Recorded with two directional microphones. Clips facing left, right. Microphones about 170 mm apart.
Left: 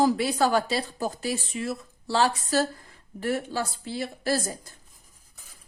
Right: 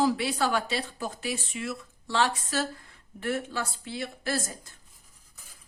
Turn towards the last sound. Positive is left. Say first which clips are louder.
# left 4 dB
turn(degrees=35)  # may be behind; listen again after turning